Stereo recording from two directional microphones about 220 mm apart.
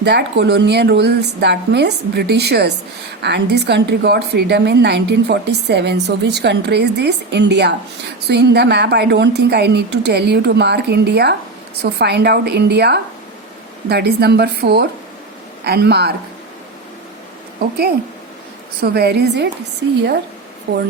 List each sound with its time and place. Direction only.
0.0 s a woman's voice: 50° right (ahead or behind)
17.6 s a woman's voice: 45° right (ahead or behind)